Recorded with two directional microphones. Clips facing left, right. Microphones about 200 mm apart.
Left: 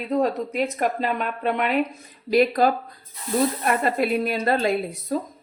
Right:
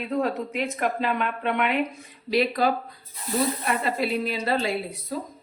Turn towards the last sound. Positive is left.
turn(degrees=45)  # may be behind; listen again after turning